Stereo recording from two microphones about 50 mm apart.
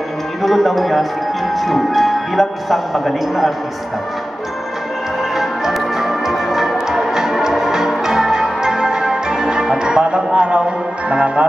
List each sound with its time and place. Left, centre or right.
0.4 s speech: centre
5.3 s music: centre